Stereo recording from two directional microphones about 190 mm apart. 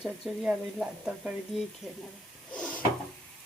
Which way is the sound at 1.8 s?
15° left (ahead or behind).